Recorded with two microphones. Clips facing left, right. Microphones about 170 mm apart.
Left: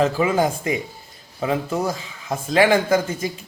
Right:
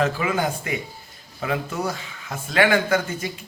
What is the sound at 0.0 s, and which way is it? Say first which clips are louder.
Speech: left 4 dB; 30° left (ahead or behind).